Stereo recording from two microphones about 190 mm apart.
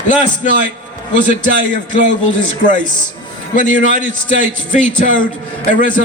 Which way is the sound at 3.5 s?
45° left (ahead or behind).